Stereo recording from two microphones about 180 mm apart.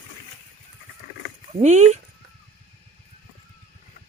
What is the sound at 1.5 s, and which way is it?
Speech, 40° right (ahead or behind).